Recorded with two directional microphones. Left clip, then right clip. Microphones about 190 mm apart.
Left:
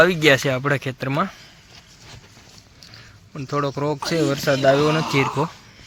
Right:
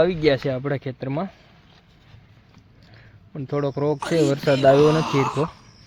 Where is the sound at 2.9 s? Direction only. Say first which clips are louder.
Left 1 dB; 5° right (ahead or behind).